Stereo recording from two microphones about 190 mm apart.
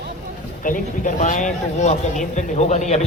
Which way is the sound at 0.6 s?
45° left (ahead or behind).